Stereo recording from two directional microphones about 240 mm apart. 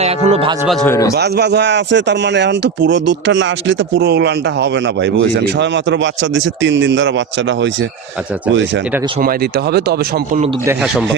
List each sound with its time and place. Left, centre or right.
0.0 s speech: right
0.7 s speech: centre
1.1 s speech: right